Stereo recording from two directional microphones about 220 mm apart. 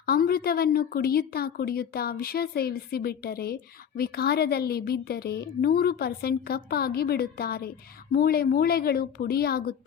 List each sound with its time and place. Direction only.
0.0 s speech: 45° left (ahead or behind)